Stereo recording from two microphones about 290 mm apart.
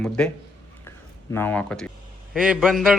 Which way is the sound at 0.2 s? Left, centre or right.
Centre.